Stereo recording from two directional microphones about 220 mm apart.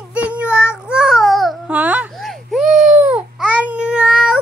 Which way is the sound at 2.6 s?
35° right (ahead or behind).